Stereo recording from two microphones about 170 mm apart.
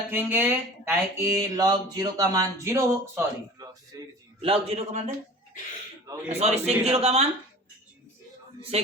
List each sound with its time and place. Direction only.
0.1 s a man's voice: 15° right (ahead or behind)
4.4 s a man's voice: 35° right (ahead or behind)
6.1 s a man's voice: 20° right (ahead or behind)
6.4 s a man's voice: 40° right (ahead or behind)
8.7 s a man's voice: 35° right (ahead or behind)